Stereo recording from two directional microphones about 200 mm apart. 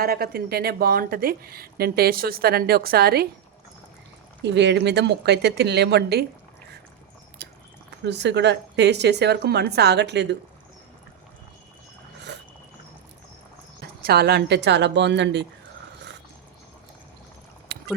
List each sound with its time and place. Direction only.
0.0 s speech: 50° right (ahead or behind)
4.4 s a woman's voice: 60° right (ahead or behind)
8.0 s a woman's voice: 60° right (ahead or behind)
12.3 s a sound: 60° right (ahead or behind)
14.0 s a woman's voice: 50° right (ahead or behind)
17.7 s a sound: 50° right (ahead or behind)